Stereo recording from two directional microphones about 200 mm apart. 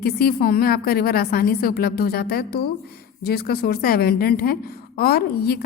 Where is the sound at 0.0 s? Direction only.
50° left (ahead or behind).